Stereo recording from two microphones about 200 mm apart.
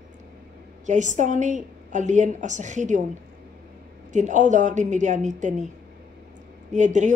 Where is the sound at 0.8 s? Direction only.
35° right (ahead or behind).